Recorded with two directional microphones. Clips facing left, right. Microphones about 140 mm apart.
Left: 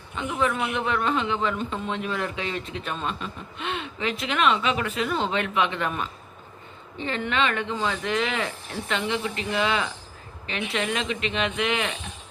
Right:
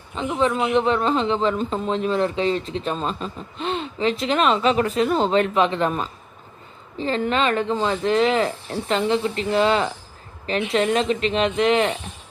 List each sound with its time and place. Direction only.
0.2 s speech: 30° right (ahead or behind)